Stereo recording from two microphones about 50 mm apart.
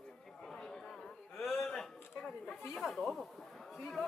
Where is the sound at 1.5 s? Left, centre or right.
Centre.